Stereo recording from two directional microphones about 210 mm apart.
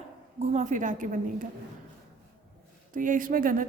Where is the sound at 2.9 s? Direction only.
40° right (ahead or behind).